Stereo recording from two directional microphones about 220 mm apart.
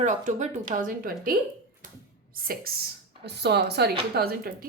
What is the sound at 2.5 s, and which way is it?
Speech, 40° right (ahead or behind).